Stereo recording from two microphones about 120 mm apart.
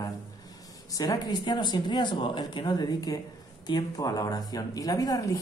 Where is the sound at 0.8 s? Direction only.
30° left (ahead or behind).